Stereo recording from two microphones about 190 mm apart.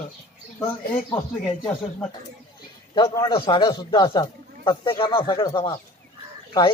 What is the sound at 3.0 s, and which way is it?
A man's voice, 20° left (ahead or behind).